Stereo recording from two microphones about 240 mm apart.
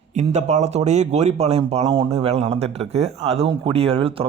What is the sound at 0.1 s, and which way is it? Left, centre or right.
Speech, right.